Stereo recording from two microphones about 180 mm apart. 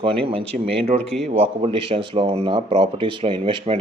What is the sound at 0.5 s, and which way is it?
Speech, 45° right (ahead or behind).